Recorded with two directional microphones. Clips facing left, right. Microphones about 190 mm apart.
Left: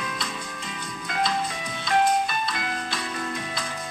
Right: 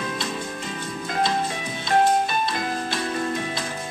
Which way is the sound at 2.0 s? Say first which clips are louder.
Right 3 dB; 25° right (ahead or behind).